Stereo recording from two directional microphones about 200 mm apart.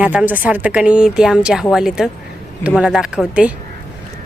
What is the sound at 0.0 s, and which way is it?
Speech, 5° right (ahead or behind).